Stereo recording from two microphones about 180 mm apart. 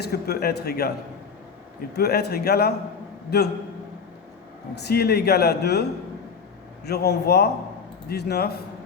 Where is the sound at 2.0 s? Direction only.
65° left (ahead or behind).